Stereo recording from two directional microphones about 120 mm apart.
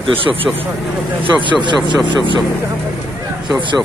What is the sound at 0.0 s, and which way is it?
Speech, 50° right (ahead or behind).